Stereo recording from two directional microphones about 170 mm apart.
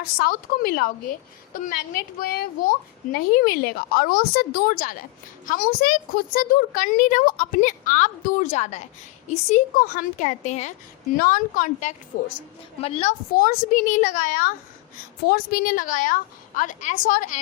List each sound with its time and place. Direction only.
0.0 s a woman's voice: 60° left (ahead or behind); by 13.1 s 40° left (ahead or behind)
13.3 s a woman's voice: 55° left (ahead or behind)